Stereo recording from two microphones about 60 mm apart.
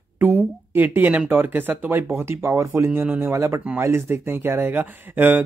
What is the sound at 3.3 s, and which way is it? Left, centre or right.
Speech, right.